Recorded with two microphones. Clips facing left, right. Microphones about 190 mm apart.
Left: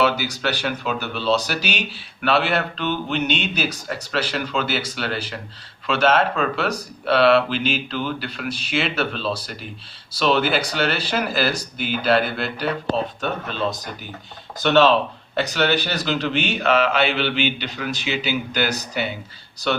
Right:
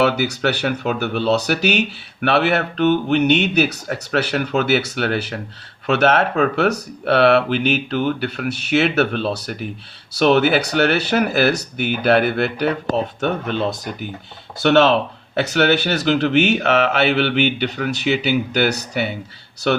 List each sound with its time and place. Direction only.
0.0 s speech: 60° right (ahead or behind)
14.6 s speech: 70° right (ahead or behind)